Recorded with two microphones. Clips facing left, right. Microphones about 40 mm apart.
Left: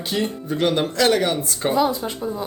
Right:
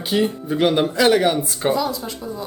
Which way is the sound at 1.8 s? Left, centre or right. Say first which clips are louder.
Left 3 dB; left.